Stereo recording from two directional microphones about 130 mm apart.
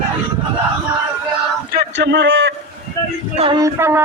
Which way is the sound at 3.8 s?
20° right (ahead or behind).